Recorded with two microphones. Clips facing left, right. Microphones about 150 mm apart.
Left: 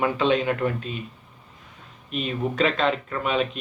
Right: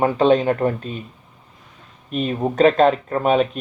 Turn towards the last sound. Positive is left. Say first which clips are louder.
# right 7 dB
turn(degrees=-45)  # may be behind; listen again after turning